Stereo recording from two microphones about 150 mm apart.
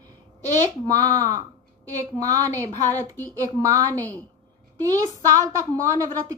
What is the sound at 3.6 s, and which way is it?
Speech, 20° right (ahead or behind).